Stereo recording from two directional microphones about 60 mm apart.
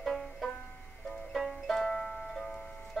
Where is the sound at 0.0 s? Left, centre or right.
Centre.